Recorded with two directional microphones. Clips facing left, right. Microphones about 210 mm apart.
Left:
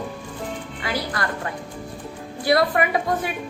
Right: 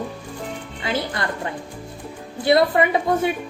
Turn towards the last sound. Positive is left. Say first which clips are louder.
# right 4 dB
turn(degrees=-25)  # may be behind; listen again after turning